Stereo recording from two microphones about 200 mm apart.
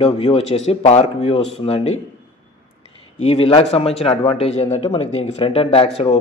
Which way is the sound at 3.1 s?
35° left (ahead or behind).